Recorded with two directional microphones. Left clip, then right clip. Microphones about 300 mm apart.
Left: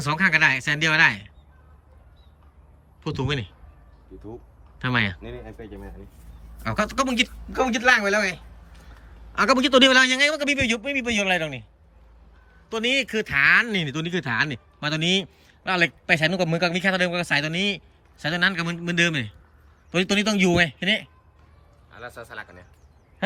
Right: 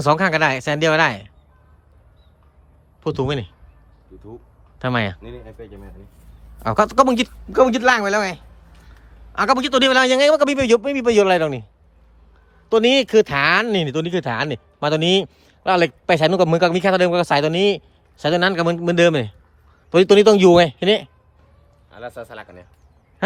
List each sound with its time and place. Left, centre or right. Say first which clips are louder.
0.0 s speech: right 3 dB; centre
3.0 s speech: right 6 dB; centre
4.8 s speech: right 2 dB; centre
12.6 s speech: right 8 dB; centre
21.8 s speech: right 6 dB; right